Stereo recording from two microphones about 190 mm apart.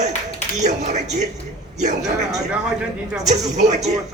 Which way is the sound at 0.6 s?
40° right (ahead or behind).